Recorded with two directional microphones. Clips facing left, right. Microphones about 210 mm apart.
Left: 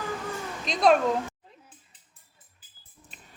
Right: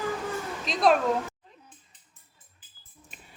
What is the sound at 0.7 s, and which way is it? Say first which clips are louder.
Speech: left 1 dB; centre (ahead or behind).